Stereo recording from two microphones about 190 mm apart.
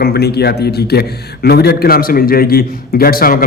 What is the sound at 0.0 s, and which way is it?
A man's voice, 55° left (ahead or behind).